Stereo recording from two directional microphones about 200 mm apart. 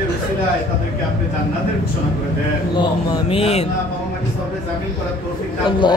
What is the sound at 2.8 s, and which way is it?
Speech, 25° left (ahead or behind).